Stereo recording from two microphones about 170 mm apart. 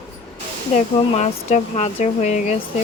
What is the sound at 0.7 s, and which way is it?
Speech, 40° left (ahead or behind).